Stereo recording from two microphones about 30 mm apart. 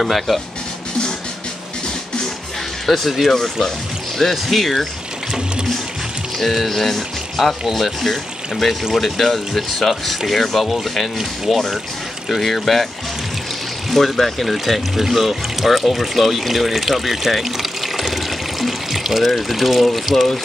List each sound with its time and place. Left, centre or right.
0.0 s speech: centre
2.9 s speech: centre
3.3 s speech: centre
4.2 s speech: centre
6.5 s speech: centre
8.0 s speech: centre
13.8 s speech: centre